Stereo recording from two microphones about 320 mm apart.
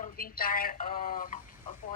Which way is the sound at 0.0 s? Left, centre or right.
Left.